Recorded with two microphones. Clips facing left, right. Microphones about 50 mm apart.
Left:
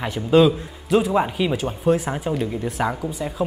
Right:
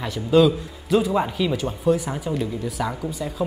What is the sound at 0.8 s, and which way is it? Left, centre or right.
Speech, centre.